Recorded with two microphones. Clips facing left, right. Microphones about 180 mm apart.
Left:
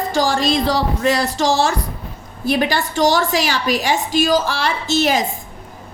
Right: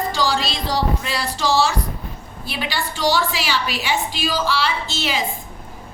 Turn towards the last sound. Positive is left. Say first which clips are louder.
# left 7 dB
turn(degrees=45)  # may be behind; listen again after turning